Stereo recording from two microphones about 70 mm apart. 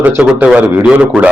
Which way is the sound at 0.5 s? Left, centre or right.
Centre.